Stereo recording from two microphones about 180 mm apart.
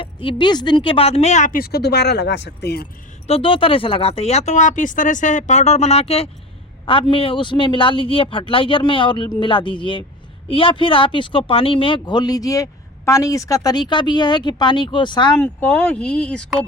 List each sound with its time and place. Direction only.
0.0 s speech: 30° left (ahead or behind); by 2.8 s 65° left (ahead or behind)
3.2 s a man's voice: 30° left (ahead or behind)
15.4 s speech: 10° left (ahead or behind)